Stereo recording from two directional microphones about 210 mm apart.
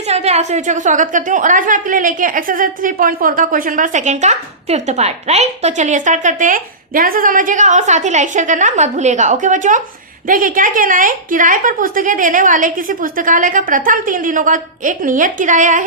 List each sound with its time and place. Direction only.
0.1 s a woman's voice: 30° right (ahead or behind)